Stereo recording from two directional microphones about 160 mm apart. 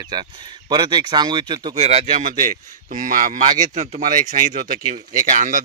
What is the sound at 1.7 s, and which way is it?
Speech, 45° right (ahead or behind).